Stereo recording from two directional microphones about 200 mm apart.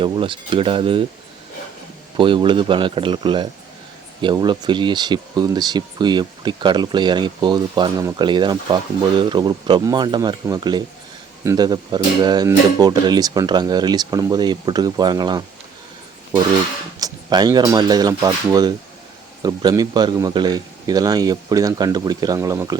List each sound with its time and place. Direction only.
0.0 s speech: 25° right (ahead or behind)
2.1 s speech: 25° right (ahead or behind)
17.0 s speech: 20° right (ahead or behind)